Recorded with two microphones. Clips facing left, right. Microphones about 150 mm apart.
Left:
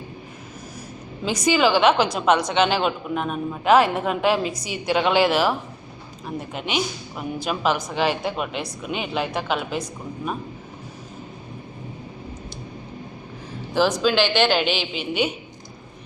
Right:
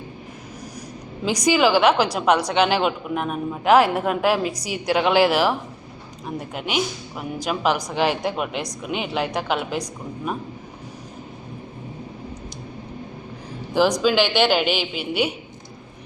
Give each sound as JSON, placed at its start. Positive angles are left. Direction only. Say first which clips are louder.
{"t": 1.2, "sound": "a woman's voice", "louder": "right 1 dB", "side_deg": -15}
{"t": 13.7, "sound": "a woman's voice", "louder": "right 1 dB", "side_deg": -15}